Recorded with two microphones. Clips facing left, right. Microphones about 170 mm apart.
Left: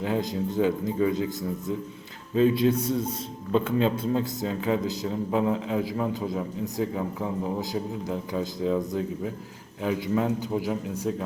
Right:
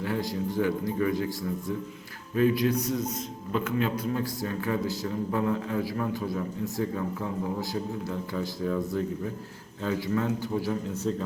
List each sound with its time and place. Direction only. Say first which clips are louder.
0.0 s a man's voice: left 3 dB; 20° left (ahead or behind)